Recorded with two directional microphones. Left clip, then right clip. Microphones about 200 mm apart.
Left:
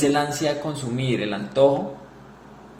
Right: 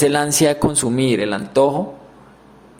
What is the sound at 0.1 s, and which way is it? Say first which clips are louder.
A man's voice: right 6 dB; 45° right (ahead or behind).